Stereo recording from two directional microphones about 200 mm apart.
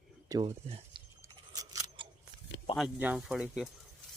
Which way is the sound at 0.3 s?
15° right (ahead or behind).